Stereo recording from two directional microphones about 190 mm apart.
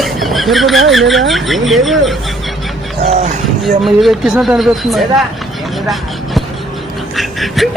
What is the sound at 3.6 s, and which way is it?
Speech, centre (ahead or behind).